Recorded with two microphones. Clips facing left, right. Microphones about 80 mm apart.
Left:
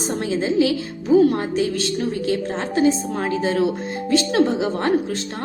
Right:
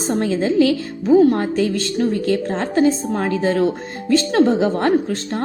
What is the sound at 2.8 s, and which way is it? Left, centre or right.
Speech, right.